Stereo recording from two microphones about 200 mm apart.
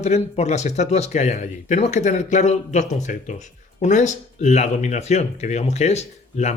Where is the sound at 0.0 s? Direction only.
35° left (ahead or behind).